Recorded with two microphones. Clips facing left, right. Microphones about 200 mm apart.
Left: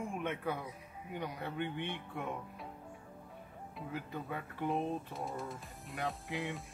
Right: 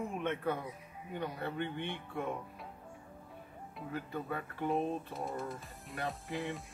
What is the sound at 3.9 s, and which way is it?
Speech, 15° left (ahead or behind).